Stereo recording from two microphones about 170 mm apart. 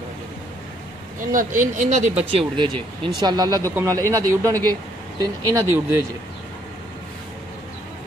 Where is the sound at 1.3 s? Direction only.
50° right (ahead or behind); by 5.7 s 20° right (ahead or behind).